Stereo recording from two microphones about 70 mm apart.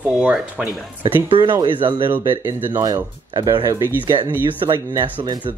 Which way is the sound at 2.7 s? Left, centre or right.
Right.